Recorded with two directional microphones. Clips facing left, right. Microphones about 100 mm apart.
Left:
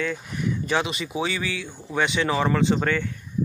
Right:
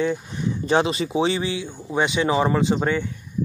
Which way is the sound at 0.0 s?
25° right (ahead or behind).